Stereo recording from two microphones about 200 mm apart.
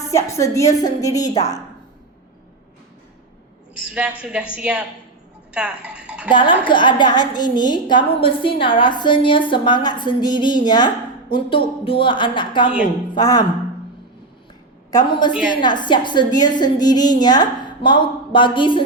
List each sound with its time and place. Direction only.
0.1 s a woman's voice: 15° left (ahead or behind)
3.8 s a sound: 5° right (ahead or behind)
4.2 s a woman's voice: 5° right (ahead or behind)
6.3 s a woman's voice: 25° left (ahead or behind)
14.8 s a woman's voice: 20° left (ahead or behind)